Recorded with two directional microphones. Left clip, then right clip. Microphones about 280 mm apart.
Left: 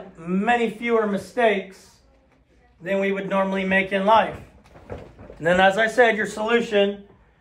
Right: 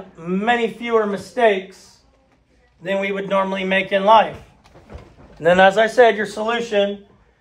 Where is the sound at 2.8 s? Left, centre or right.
Right.